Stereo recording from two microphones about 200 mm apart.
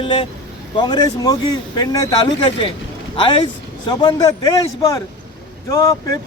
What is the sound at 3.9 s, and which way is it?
Speech, 20° left (ahead or behind).